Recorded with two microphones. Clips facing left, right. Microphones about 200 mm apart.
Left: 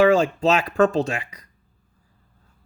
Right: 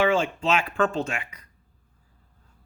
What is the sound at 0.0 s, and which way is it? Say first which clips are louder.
Speech: left 6 dB; 40° left (ahead or behind).